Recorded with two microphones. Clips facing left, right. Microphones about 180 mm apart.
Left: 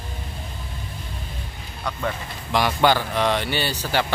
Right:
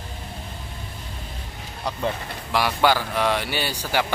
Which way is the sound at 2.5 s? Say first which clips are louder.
Left 1 dB; 5° right (ahead or behind).